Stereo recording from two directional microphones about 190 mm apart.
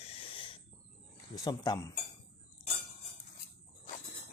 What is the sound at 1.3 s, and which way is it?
Speech, 20° left (ahead or behind).